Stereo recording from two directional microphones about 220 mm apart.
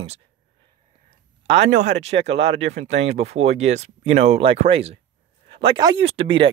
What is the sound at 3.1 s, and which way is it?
Speech, 30° right (ahead or behind).